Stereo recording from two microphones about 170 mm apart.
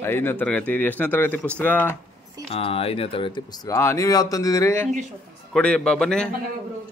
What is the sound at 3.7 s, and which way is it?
Speech, 15° left (ahead or behind).